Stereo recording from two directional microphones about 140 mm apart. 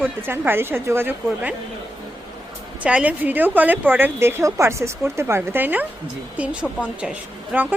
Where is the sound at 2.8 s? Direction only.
10° right (ahead or behind).